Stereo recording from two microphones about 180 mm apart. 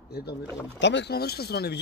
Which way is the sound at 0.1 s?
65° left (ahead or behind).